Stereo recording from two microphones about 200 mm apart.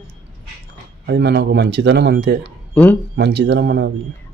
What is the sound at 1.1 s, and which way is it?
Speech, 60° right (ahead or behind).